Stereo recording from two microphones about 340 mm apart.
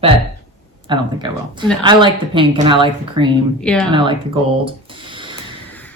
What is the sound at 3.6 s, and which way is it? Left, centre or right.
Speech, centre.